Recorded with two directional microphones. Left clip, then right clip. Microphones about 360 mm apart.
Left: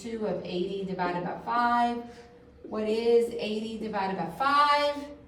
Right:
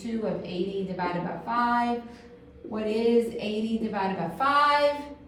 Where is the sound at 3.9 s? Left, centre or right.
Centre.